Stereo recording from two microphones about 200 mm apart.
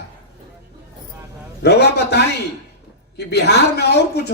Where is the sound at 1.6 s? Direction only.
55° left (ahead or behind).